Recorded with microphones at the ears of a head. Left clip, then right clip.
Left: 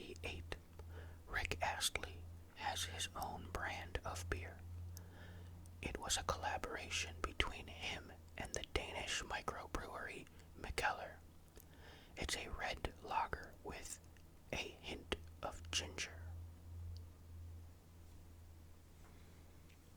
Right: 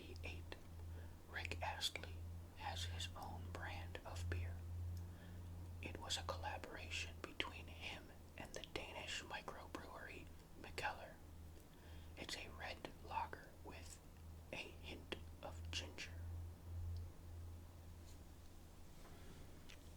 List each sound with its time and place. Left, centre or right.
0.0 s whispering: left
5.8 s whispering: left